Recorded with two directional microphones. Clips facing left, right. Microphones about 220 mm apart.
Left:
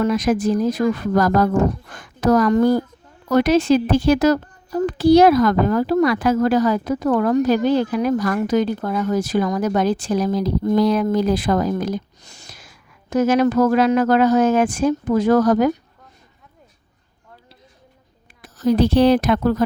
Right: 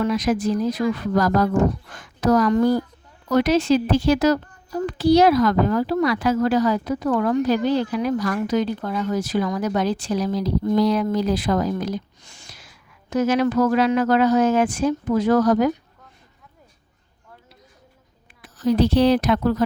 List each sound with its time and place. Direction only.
0.0 s a woman's voice: 50° left (ahead or behind)
18.4 s a woman's voice: 45° left (ahead or behind)